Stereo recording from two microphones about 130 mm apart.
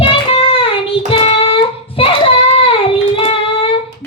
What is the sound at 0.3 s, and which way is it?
Child singing, 45° left (ahead or behind).